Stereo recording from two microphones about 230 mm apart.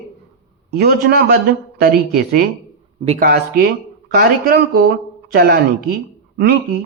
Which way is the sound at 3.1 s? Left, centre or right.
Right.